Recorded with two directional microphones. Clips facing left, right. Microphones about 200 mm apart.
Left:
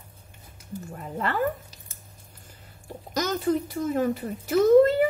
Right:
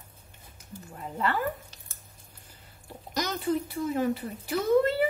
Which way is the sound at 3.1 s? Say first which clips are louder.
Left 4 dB; 45° left (ahead or behind).